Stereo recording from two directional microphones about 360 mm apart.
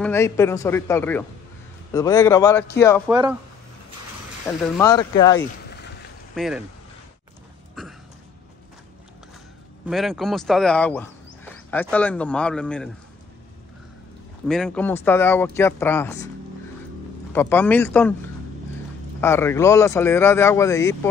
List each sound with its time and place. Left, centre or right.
0.0 s speech: centre
3.1 s speech: centre
4.5 s speech: centre
6.3 s speech: centre
7.8 s a sound: centre
9.8 s speech: centre
14.5 s speech: centre
17.3 s speech: centre
19.2 s speech: centre